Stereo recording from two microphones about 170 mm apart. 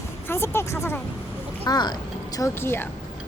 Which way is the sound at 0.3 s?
15° left (ahead or behind).